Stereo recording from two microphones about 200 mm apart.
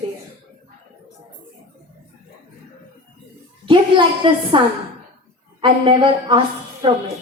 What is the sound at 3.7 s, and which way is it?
Speech, 25° right (ahead or behind).